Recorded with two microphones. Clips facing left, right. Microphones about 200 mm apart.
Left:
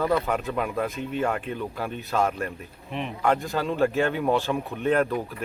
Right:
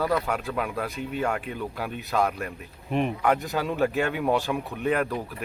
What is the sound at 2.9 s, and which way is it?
Speech, 50° right (ahead or behind).